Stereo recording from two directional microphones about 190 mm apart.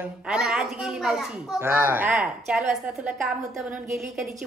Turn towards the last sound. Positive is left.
turn(degrees=-5)  # may be behind; listen again after turning